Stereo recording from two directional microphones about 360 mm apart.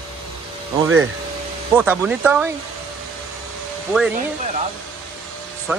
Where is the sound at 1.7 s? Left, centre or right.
Centre.